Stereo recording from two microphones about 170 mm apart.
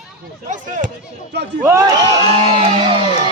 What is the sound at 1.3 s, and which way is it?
Speech, 85° right.